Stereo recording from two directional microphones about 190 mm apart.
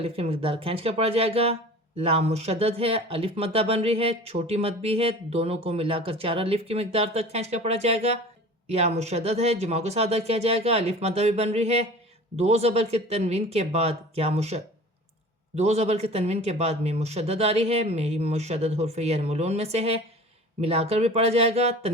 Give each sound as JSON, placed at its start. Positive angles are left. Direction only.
{"t": 0.0, "sound": "speech", "side_deg": -30}